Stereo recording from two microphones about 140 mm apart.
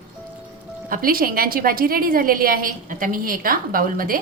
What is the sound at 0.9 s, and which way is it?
A woman's voice, 90° right.